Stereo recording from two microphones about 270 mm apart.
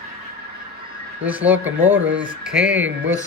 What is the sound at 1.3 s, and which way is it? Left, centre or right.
Speech, centre.